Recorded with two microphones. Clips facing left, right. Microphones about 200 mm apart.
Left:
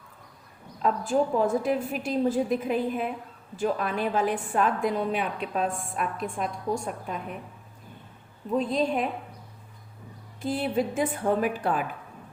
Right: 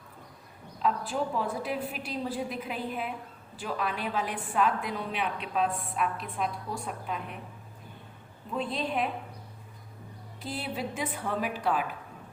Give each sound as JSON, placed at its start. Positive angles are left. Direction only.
{"t": 0.8, "sound": "a woman's voice", "side_deg": 45}
{"t": 8.5, "sound": "a woman's voice", "side_deg": 40}
{"t": 10.4, "sound": "a woman's voice", "side_deg": 50}